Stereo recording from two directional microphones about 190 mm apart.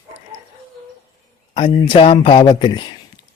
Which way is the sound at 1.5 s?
30° left (ahead or behind).